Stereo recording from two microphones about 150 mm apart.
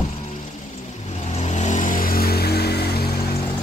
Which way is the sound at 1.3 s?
50° left (ahead or behind).